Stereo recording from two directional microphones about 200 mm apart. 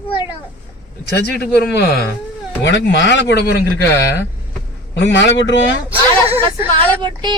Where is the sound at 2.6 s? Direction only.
65° left (ahead or behind).